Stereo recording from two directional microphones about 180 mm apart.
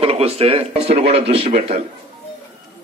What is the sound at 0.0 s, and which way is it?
A man's voice, 35° right (ahead or behind).